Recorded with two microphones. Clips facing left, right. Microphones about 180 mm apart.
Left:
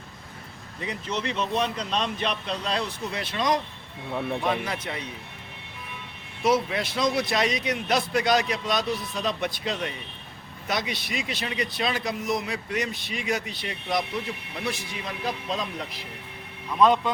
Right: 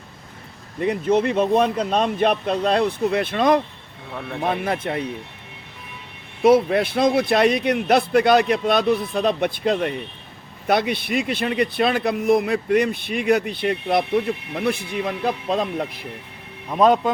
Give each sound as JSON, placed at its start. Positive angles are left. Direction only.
{"t": 0.8, "sound": "speech", "side_deg": -55}
{"t": 4.1, "sound": "speech", "side_deg": 10}
{"t": 4.4, "sound": "speech", "side_deg": -55}
{"t": 6.4, "sound": "speech", "side_deg": -55}
{"t": 16.7, "sound": "speech", "side_deg": -45}